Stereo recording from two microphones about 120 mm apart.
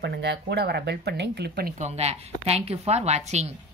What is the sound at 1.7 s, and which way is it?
A woman's voice, 70° right (ahead or behind).